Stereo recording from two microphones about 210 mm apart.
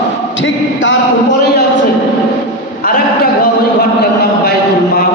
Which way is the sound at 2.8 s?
45° left (ahead or behind).